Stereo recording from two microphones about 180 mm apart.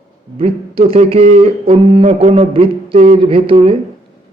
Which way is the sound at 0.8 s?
30° right (ahead or behind).